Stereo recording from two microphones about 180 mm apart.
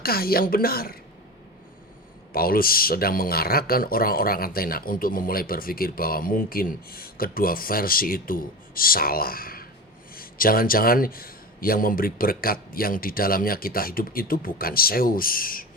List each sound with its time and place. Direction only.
0.0 s speech: 55° left (ahead or behind)
2.3 s a man's voice: 55° left (ahead or behind)